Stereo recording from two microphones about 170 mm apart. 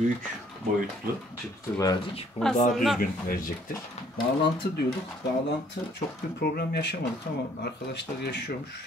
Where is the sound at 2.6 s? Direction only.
45° left (ahead or behind).